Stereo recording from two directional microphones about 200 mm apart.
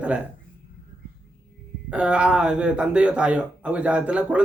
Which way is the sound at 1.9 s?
5° right (ahead or behind).